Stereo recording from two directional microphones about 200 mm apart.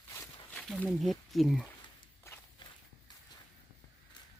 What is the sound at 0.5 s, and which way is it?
Speech, 5° left (ahead or behind).